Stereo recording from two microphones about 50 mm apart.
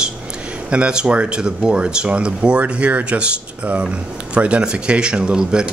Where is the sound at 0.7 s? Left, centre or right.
Right.